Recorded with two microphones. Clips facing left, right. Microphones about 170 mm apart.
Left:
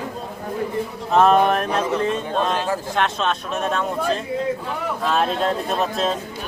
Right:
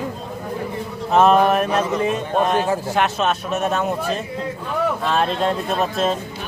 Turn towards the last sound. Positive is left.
turn(degrees=0)  # may be behind; listen again after turning